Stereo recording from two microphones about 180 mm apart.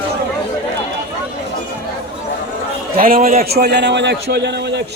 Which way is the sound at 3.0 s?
50° right (ahead or behind).